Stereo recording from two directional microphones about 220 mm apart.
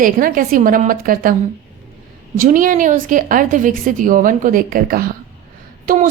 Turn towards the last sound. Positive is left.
turn(degrees=-40)  # may be behind; listen again after turning